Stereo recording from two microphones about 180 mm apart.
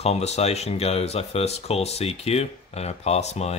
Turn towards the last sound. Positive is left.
turn(degrees=35)  # may be behind; listen again after turning